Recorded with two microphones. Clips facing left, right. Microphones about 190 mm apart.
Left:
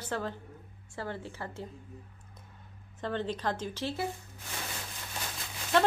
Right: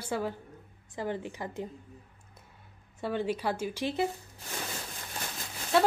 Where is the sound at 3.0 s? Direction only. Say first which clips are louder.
Right 3 dB; 10° right (ahead or behind).